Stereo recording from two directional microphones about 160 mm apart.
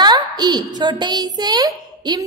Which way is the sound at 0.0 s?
25° right (ahead or behind).